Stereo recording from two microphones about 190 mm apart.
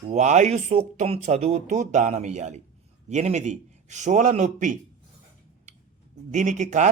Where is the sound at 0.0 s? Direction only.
35° right (ahead or behind).